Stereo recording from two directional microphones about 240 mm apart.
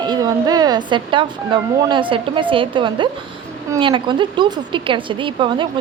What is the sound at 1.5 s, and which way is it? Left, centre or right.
A woman's voice, centre.